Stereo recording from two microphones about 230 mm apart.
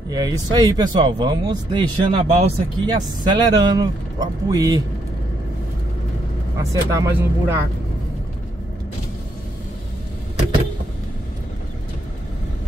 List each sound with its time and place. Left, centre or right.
0.1 s speech: centre
6.7 s speech: centre